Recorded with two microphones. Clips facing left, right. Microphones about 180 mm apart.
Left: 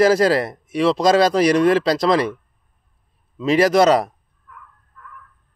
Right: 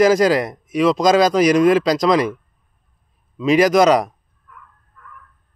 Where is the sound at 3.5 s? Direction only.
30° left (ahead or behind).